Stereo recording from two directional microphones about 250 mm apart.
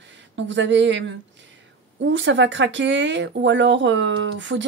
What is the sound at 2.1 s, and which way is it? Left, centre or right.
Speech, right.